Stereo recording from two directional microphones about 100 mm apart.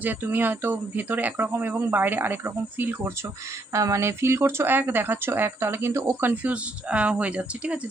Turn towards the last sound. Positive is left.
turn(degrees=-15)  # may be behind; listen again after turning